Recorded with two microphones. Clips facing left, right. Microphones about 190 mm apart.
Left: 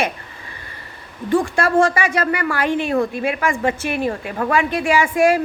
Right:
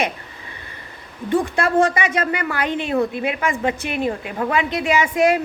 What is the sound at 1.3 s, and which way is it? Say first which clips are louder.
A woman's voice: left 2 dB; 20° right (ahead or behind).